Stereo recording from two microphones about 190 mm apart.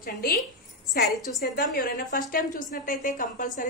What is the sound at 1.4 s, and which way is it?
A woman's voice, 50° left (ahead or behind).